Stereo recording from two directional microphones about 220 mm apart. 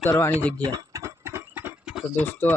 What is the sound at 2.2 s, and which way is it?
Speech, 5° left (ahead or behind).